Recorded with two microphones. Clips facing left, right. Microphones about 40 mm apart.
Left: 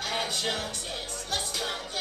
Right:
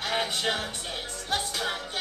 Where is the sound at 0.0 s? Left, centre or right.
Right.